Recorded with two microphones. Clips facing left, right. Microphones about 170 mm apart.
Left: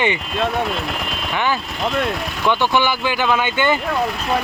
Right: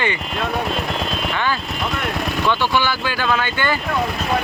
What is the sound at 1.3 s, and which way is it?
Speech, 15° left (ahead or behind).